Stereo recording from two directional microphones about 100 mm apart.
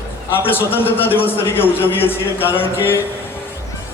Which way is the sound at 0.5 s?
20° left (ahead or behind).